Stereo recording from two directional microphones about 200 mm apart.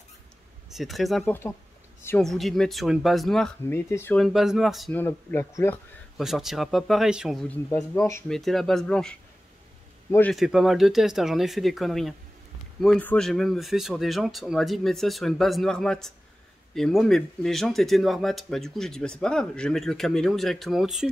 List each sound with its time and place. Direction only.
0.7 s speech: centre (ahead or behind)
5.0 s speech: 15° left (ahead or behind)
6.1 s speech: centre (ahead or behind)
8.3 s speech: centre (ahead or behind)
10.3 s speech: centre (ahead or behind)